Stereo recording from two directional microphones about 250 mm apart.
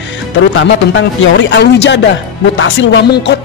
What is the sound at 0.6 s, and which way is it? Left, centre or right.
Speech, left.